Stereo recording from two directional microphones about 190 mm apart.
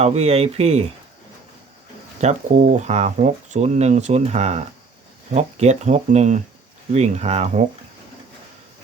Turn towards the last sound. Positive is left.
turn(degrees=-35)  # may be behind; listen again after turning